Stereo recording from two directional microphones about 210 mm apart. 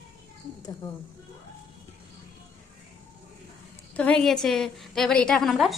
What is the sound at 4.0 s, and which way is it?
A woman's voice, 5° left (ahead or behind).